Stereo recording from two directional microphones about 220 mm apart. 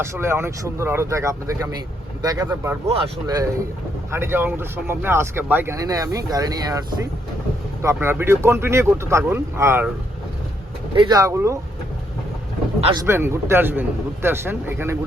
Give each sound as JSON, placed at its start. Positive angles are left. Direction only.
{"t": 0.0, "sound": "speech", "side_deg": -10}
{"t": 10.9, "sound": "speech", "side_deg": -20}
{"t": 13.1, "sound": "speech", "side_deg": -10}